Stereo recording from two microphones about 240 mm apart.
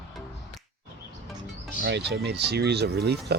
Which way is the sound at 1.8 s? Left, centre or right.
Right.